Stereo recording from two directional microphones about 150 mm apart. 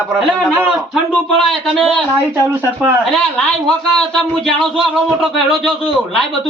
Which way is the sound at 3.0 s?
5° left (ahead or behind).